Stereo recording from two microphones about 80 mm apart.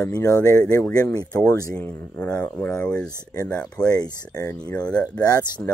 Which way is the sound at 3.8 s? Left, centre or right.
Left.